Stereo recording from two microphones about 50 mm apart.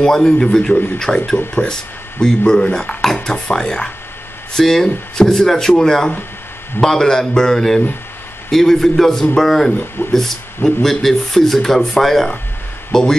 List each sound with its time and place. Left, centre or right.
0.0 s speech: centre